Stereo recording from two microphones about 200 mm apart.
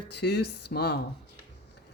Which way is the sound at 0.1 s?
60° left (ahead or behind).